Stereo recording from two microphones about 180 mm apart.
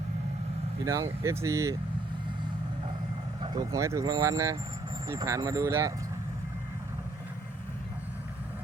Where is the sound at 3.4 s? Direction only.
20° right (ahead or behind).